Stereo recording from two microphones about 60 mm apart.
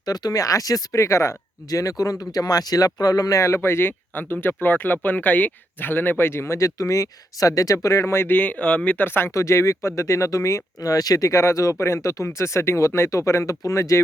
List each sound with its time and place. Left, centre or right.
0.0 s speech: left
8.4 s speech: left
9.3 s speech: left
11.8 s speech: left